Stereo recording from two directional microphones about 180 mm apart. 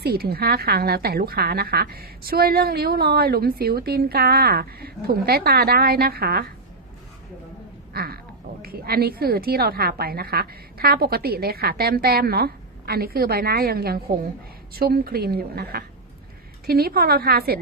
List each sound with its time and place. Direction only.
0.0 s a woman's voice: 60° right (ahead or behind)
7.9 s a sound: 60° right (ahead or behind)
8.6 s a woman's voice: 55° right (ahead or behind)